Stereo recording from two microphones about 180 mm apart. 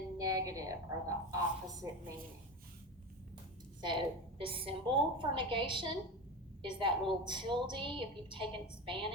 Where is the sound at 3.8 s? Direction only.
30° right (ahead or behind).